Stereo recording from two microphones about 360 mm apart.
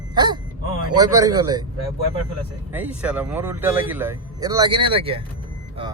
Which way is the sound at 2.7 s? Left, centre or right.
Centre.